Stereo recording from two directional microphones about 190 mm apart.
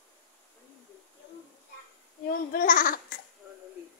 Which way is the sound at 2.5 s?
45° left (ahead or behind).